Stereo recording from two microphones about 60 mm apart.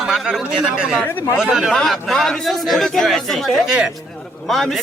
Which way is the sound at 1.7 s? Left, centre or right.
Centre.